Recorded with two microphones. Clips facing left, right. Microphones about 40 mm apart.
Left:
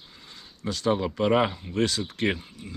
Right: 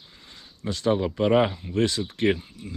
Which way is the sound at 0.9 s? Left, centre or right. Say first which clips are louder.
Right 2 dB; centre.